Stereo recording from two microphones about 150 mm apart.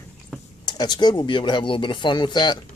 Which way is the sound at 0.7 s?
30° left (ahead or behind).